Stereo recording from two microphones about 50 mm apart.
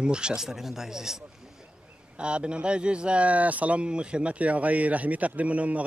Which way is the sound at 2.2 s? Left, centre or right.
Right.